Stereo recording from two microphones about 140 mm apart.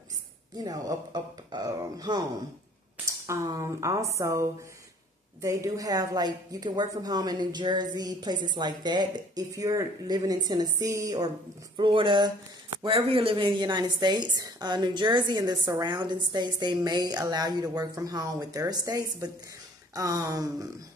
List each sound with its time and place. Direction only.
0.7 s speech: 30° right (ahead or behind)
3.3 s a woman's voice: 20° right (ahead or behind)